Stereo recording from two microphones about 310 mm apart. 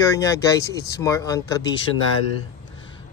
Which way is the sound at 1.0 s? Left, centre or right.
Centre.